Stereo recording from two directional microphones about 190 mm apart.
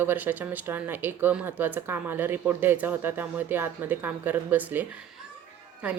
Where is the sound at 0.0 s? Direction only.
10° right (ahead or behind).